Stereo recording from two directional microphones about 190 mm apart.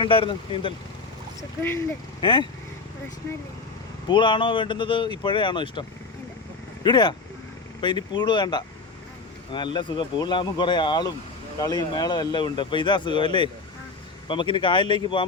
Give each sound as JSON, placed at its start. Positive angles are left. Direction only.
{"t": 0.0, "sound": "speech", "side_deg": 25}
{"t": 1.4, "sound": "speech", "side_deg": 10}
{"t": 2.2, "sound": "speech", "side_deg": 25}
{"t": 4.1, "sound": "speech", "side_deg": 25}
{"t": 6.8, "sound": "speech", "side_deg": 25}